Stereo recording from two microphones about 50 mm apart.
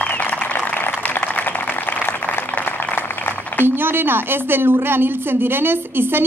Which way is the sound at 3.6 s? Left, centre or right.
Right.